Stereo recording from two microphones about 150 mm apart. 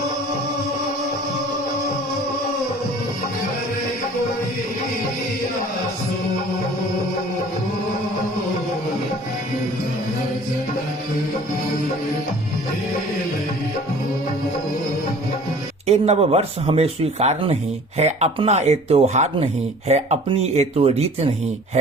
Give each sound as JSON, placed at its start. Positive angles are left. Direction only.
{"t": 15.9, "sound": "speech", "side_deg": -45}